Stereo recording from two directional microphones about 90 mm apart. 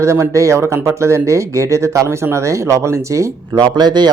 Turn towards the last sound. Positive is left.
turn(degrees=-50)  # may be behind; listen again after turning